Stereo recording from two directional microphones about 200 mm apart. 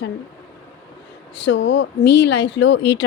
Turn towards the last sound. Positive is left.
turn(degrees=65)  # may be behind; listen again after turning